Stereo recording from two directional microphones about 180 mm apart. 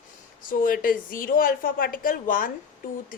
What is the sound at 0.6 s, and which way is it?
A woman's voice, 50° left (ahead or behind).